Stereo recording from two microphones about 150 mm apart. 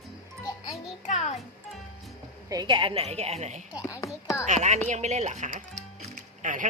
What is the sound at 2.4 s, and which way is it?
A woman's voice, 30° right (ahead or behind).